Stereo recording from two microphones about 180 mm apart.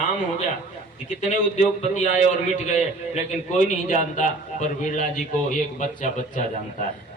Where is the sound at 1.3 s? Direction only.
40° left (ahead or behind).